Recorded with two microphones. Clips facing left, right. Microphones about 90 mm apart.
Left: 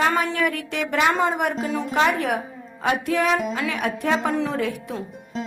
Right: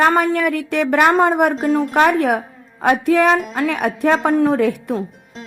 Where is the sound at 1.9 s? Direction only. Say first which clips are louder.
Right 4 dB; 55° right (ahead or behind).